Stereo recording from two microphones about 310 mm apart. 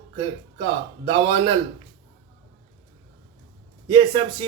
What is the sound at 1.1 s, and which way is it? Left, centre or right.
Speech, centre.